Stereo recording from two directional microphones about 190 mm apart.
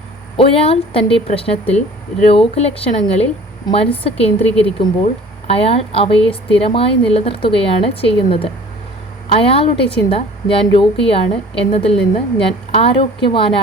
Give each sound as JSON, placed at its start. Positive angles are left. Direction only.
{"t": 0.3, "sound": "a woman's voice", "side_deg": 30}